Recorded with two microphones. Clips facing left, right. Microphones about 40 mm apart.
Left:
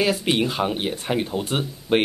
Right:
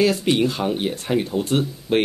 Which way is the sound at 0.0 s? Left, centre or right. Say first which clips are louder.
Right 3 dB; centre.